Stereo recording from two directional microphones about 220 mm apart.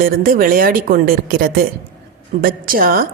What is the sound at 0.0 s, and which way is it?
A woman's voice, 40° right (ahead or behind).